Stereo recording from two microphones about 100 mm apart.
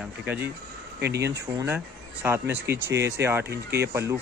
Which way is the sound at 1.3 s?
30° right (ahead or behind).